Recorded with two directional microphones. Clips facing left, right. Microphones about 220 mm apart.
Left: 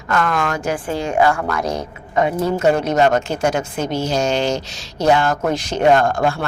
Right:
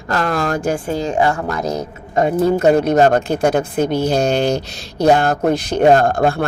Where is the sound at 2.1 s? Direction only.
50° right (ahead or behind).